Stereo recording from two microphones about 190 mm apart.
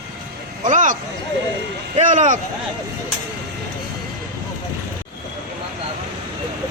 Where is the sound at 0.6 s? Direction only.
40° right (ahead or behind).